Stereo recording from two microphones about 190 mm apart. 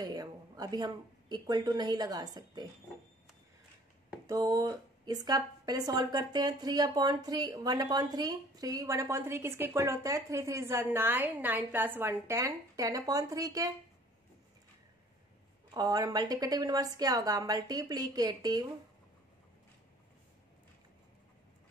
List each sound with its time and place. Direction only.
0.0 s speech: 20° right (ahead or behind)
4.3 s speech: 20° right (ahead or behind)
15.7 s speech: 20° right (ahead or behind)